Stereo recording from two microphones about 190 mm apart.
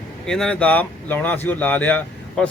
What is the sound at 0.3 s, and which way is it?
Speech, 5° left (ahead or behind).